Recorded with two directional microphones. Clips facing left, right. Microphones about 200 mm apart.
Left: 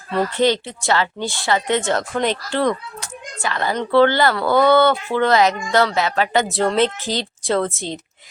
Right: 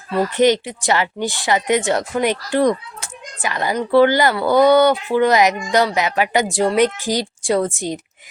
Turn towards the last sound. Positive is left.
turn(degrees=-15)  # may be behind; listen again after turning